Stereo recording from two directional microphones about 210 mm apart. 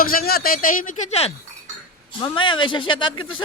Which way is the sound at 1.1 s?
30° left (ahead or behind).